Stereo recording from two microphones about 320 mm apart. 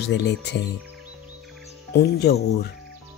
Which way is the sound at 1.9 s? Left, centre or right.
Left.